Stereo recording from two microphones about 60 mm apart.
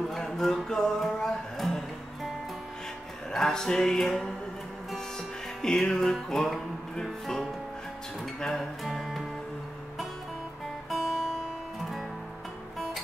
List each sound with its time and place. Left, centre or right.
0.1 s music: centre
3.3 s music: centre
5.6 s music: centre
10.9 s guitar: centre